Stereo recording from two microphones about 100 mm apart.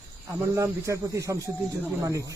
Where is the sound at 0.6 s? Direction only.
30° right (ahead or behind).